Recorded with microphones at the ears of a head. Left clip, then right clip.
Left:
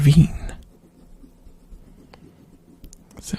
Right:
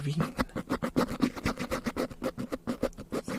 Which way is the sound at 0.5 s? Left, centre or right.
Right.